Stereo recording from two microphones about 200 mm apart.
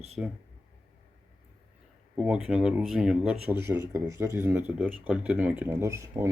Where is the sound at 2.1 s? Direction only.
5° right (ahead or behind).